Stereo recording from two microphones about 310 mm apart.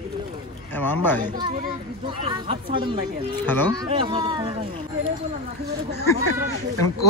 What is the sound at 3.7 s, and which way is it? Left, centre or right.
Speech, centre.